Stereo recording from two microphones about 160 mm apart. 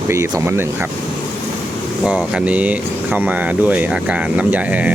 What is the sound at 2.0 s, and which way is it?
Speech, 5° right (ahead or behind).